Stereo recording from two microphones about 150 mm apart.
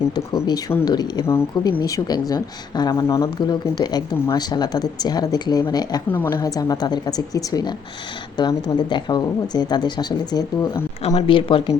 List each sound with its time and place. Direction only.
0.1 s speech: 30° left (ahead or behind)
6.1 s a woman's voice: 15° left (ahead or behind)
6.3 s speech: 25° left (ahead or behind)
11.0 s speech: 40° left (ahead or behind)